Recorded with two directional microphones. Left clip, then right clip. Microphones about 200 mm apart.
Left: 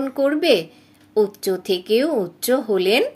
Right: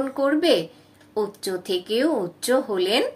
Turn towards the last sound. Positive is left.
turn(degrees=45)  # may be behind; listen again after turning